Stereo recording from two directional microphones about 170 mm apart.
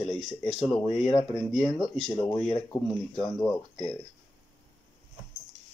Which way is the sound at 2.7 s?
5° left (ahead or behind).